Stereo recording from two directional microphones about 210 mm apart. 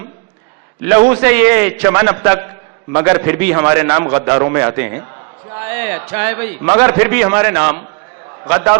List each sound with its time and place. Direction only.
0.8 s a man's voice: 10° right (ahead or behind)
1.0 s a man's voice: 20° right (ahead or behind)